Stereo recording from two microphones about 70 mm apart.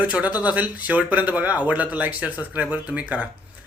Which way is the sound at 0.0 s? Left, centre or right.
Right.